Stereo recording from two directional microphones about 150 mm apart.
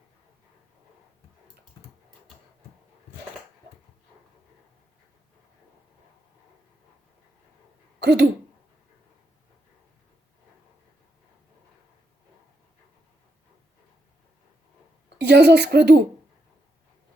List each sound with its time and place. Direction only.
7.9 s speech: 90° right
15.2 s speech: 90° right